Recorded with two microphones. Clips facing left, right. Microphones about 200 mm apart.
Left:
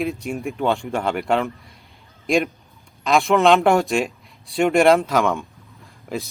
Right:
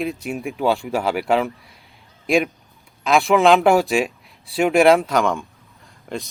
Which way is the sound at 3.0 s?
Centre (ahead or behind).